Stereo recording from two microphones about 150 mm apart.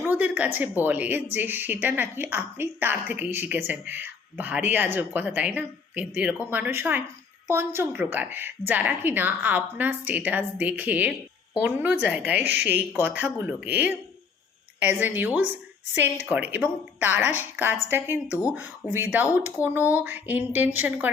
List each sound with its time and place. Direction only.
0.0 s speech: 10° right (ahead or behind)